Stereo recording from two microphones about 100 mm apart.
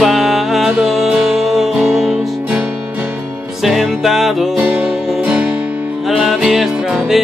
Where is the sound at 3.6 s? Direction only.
5° right (ahead or behind).